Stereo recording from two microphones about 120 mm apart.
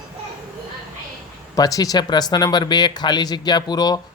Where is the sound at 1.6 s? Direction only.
30° left (ahead or behind).